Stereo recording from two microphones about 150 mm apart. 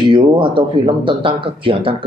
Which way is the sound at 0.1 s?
35° right (ahead or behind).